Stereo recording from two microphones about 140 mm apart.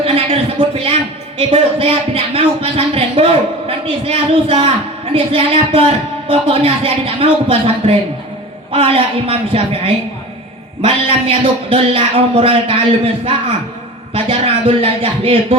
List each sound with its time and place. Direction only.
0.0 s speech: 40° right (ahead or behind)